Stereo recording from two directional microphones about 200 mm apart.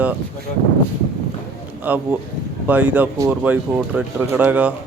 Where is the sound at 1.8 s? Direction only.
10° right (ahead or behind).